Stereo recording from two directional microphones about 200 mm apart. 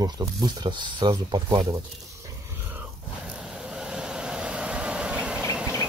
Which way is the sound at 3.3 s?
5° right (ahead or behind).